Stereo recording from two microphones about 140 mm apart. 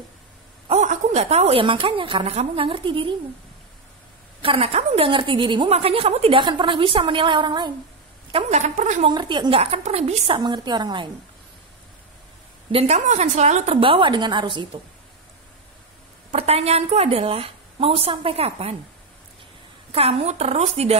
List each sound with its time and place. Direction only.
0.7 s a woman's voice: 50° right (ahead or behind); by 3.2 s 35° right (ahead or behind)
4.4 s a woman's voice: 40° right (ahead or behind)
8.3 s a woman's voice: 50° right (ahead or behind)
9.0 s a woman's voice: 35° right (ahead or behind)
9.6 s a woman's voice: 45° right (ahead or behind); by 11.1 s 30° right (ahead or behind)
12.7 s a woman's voice: 50° right (ahead or behind); by 14.8 s 35° right (ahead or behind)
16.3 s a woman's voice: 45° right (ahead or behind)
19.9 s a woman's voice: 45° right (ahead or behind)